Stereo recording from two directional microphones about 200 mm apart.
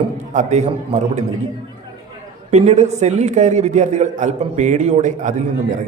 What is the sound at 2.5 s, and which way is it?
A man's voice, 35° right (ahead or behind).